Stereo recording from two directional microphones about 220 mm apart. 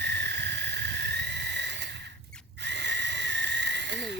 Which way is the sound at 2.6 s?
50° right (ahead or behind).